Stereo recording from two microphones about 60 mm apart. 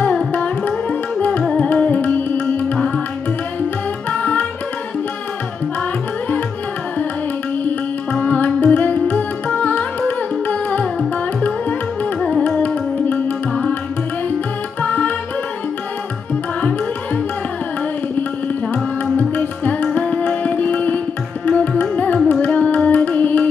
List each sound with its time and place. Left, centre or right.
0.3 s music: left
4.1 s tabla: left
8.1 s music: left
12.2 s music: centre
14.8 s music: left
18.7 s music: left